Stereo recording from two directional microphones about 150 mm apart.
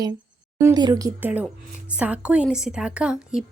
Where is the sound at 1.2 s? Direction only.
10° right (ahead or behind).